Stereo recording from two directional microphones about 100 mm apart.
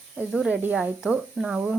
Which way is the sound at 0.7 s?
5° right (ahead or behind).